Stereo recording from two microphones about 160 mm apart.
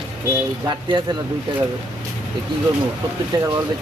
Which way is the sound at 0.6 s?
25° right (ahead or behind).